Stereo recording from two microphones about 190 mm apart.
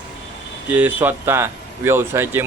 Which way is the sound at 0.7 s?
10° right (ahead or behind).